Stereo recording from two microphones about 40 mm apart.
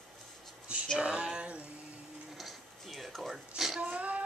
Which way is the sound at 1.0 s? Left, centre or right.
Right.